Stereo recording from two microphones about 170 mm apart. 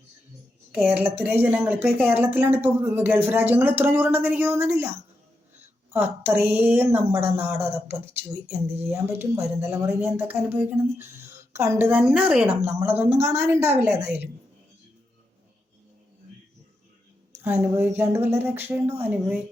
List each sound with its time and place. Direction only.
0.7 s a woman's voice: 5° right (ahead or behind)
5.9 s a woman's voice: 10° right (ahead or behind)
17.4 s a woman's voice: 10° right (ahead or behind)